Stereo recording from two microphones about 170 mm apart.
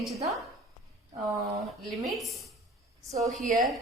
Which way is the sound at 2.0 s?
Centre (ahead or behind).